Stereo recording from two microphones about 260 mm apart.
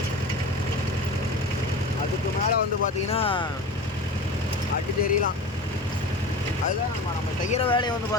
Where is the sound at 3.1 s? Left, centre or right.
Centre.